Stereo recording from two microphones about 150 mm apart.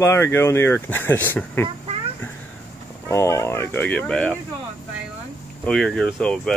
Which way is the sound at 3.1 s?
20° left (ahead or behind).